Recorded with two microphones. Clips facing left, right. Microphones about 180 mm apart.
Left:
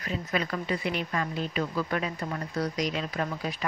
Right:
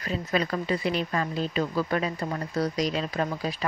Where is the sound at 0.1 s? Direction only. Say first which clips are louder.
Right 3 dB; 35° right (ahead or behind).